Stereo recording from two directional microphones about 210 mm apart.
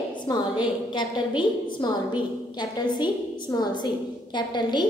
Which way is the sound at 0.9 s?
20° left (ahead or behind).